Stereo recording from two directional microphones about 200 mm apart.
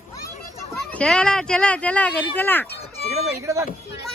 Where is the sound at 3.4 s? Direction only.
15° right (ahead or behind).